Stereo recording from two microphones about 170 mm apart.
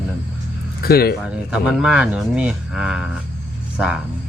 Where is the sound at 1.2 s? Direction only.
5° right (ahead or behind).